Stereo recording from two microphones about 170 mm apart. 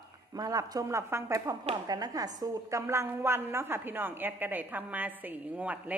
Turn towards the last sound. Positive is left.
turn(degrees=-10)  # may be behind; listen again after turning